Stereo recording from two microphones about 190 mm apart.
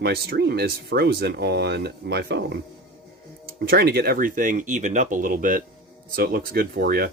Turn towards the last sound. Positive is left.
turn(degrees=-50)  # may be behind; listen again after turning